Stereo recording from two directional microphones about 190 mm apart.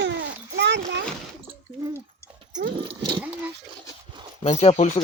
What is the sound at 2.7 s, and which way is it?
Horse, 25° right (ahead or behind).